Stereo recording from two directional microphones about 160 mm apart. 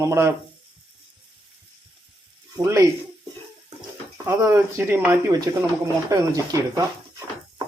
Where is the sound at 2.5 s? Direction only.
20° right (ahead or behind).